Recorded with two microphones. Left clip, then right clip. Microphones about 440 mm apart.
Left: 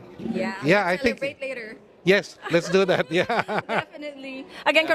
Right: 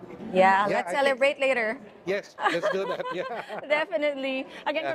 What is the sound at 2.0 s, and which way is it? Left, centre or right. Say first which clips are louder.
Speech: left 5 dB; left.